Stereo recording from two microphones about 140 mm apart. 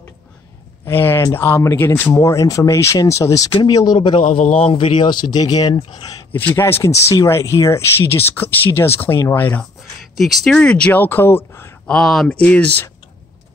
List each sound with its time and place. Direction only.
0.8 s speech: 15° left (ahead or behind)
5.8 s speech: 40° left (ahead or behind)
6.3 s speech: 15° left (ahead or behind)
10.1 s speech: centre (ahead or behind); by 11.7 s 15° left (ahead or behind)
11.9 s speech: centre (ahead or behind)